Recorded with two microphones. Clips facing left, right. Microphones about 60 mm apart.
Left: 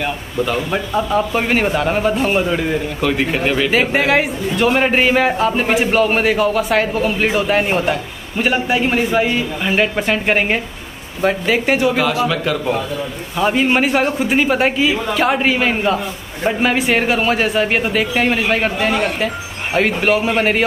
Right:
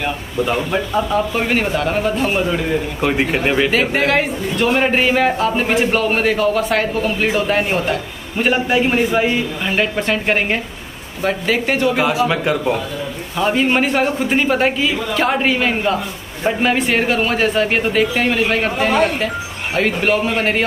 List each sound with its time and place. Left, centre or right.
0.7 s a man's voice: centre
3.0 s speech: centre
3.7 s a man's voice: centre
12.0 s speech: centre
13.4 s a man's voice: centre